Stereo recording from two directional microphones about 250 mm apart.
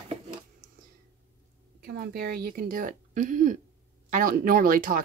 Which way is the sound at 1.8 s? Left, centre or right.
Right.